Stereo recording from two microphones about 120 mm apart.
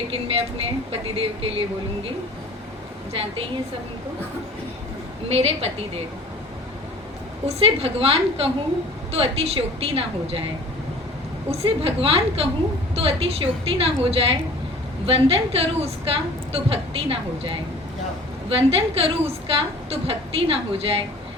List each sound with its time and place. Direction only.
0.1 s a woman's voice: 55° right (ahead or behind)
5.3 s a woman's voice: 55° right (ahead or behind)
7.4 s a woman's voice: 55° right (ahead or behind)
11.5 s a woman's voice: 55° right (ahead or behind)